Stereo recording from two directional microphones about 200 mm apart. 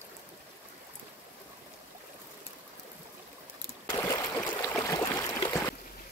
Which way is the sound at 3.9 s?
15° left (ahead or behind).